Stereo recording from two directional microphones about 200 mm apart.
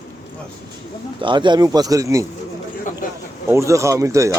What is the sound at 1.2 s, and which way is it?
Speech, 25° right (ahead or behind).